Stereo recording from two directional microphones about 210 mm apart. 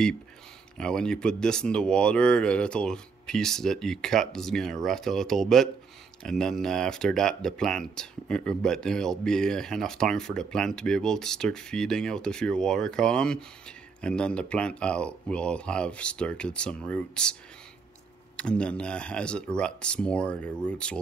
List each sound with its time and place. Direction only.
0.7 s speech: 5° left (ahead or behind)